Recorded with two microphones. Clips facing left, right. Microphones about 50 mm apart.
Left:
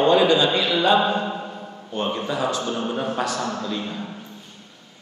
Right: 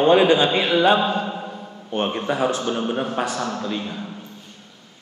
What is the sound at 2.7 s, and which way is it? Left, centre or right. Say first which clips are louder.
A man's voice: right 2 dB; right.